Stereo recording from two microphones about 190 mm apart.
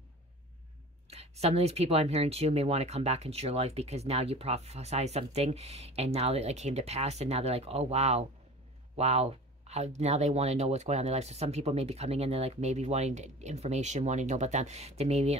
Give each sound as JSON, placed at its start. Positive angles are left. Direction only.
{"t": 1.1, "sound": "speech", "side_deg": -35}